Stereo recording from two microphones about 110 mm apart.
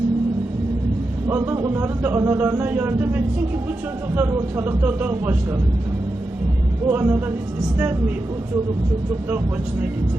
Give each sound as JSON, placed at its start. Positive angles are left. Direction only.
{"t": 1.3, "sound": "speech", "side_deg": -25}
{"t": 6.8, "sound": "speech", "side_deg": -20}